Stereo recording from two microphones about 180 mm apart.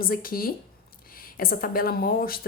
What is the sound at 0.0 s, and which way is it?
Speech, 55° left (ahead or behind).